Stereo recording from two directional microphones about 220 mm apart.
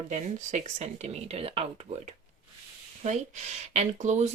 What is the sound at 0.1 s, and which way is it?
Speech, 30° right (ahead or behind).